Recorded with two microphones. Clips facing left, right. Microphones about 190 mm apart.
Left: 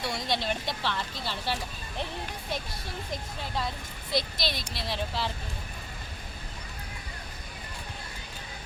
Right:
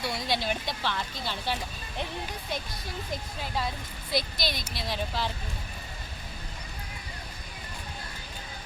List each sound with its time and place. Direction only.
0.0 s speech: centre (ahead or behind)
4.1 s a woman's voice: 25° left (ahead or behind)
4.8 s speech: centre (ahead or behind)